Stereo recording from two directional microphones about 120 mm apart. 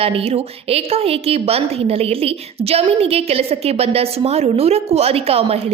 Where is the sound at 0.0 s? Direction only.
50° right (ahead or behind).